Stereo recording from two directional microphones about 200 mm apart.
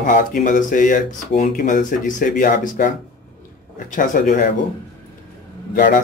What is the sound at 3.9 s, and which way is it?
Speech, 40° left (ahead or behind).